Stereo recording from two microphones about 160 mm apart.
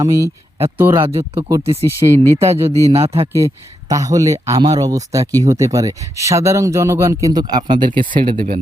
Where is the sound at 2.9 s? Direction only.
35° right (ahead or behind).